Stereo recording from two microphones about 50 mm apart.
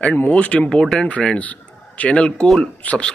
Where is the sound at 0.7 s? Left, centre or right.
Centre.